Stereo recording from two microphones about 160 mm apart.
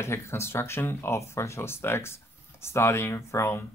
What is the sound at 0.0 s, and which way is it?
Speech, 15° left (ahead or behind).